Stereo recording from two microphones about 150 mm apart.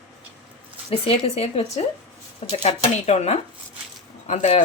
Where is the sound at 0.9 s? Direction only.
40° left (ahead or behind).